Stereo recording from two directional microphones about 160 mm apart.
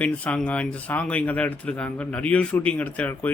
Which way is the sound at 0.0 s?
10° left (ahead or behind).